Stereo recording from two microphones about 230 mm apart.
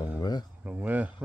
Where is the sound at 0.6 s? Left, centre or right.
Centre.